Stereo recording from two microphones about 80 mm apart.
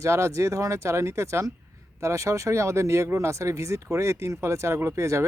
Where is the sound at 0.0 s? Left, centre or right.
Right.